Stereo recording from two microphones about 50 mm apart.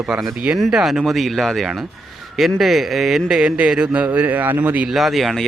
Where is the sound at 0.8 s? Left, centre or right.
Centre.